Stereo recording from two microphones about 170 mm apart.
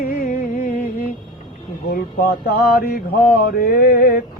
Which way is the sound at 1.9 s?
65° left (ahead or behind).